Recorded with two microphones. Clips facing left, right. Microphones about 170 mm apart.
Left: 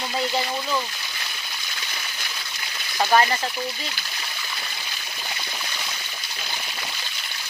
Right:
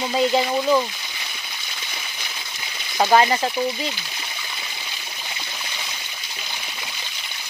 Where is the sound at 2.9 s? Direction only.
20° right (ahead or behind).